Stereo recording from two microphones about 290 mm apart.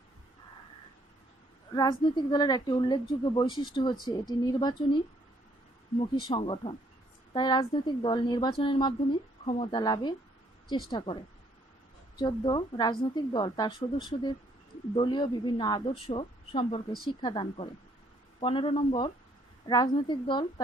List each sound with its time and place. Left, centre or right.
1.7 s a woman's voice: centre
12.2 s a woman's voice: centre